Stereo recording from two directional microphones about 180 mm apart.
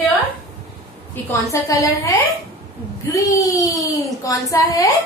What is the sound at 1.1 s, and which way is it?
A woman's voice, 15° left (ahead or behind).